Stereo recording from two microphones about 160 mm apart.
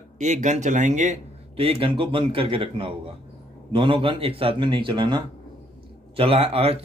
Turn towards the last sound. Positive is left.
turn(degrees=-35)  # may be behind; listen again after turning